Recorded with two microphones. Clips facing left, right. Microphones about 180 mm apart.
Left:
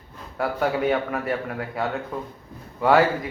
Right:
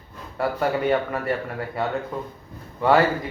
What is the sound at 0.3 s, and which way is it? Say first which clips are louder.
A man's voice: even; centre (ahead or behind).